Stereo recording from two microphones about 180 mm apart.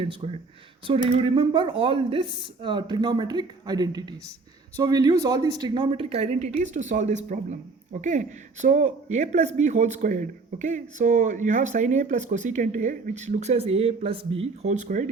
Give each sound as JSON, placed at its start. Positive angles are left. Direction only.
{"t": 0.0, "sound": "speech", "side_deg": -35}